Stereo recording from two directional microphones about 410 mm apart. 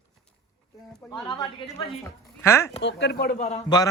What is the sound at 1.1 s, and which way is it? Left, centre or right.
A man's voice, centre.